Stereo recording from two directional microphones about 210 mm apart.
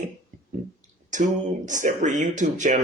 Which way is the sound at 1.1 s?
35° right (ahead or behind).